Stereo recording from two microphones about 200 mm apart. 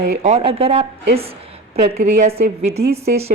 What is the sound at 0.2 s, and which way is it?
Speech, 30° right (ahead or behind).